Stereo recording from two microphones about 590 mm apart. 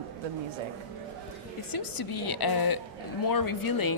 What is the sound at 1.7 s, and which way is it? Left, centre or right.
A woman's voice, left.